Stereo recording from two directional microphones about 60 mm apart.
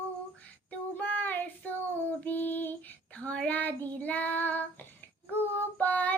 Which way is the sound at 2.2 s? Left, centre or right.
Left.